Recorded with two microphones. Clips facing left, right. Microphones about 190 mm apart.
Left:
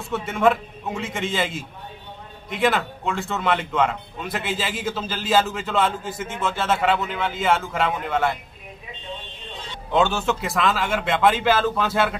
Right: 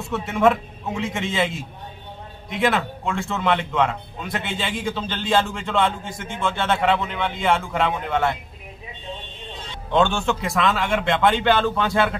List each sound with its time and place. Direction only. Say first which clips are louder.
0.0 s speech: right 1 dB; centre (ahead or behind)
9.9 s speech: right 1 dB; 5° left (ahead or behind)